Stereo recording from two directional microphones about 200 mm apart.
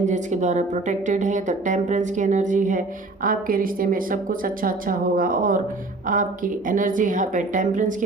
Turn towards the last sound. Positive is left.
turn(degrees=-40)  # may be behind; listen again after turning